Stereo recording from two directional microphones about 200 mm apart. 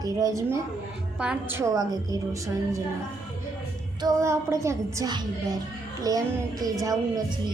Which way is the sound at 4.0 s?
15° right (ahead or behind).